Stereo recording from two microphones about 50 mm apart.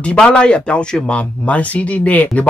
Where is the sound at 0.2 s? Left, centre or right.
Centre.